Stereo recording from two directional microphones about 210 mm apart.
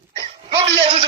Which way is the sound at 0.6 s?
30° right (ahead or behind).